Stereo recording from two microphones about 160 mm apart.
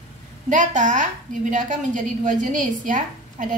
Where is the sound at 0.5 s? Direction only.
50° right (ahead or behind).